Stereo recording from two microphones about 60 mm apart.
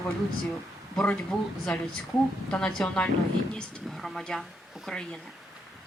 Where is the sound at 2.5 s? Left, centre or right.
Centre.